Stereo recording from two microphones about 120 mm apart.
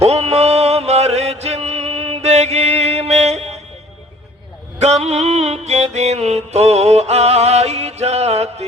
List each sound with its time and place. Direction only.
0.0 s music: 60° right (ahead or behind)
4.8 s music: 65° right (ahead or behind)